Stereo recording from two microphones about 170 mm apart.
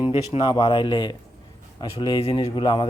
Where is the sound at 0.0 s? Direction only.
30° left (ahead or behind).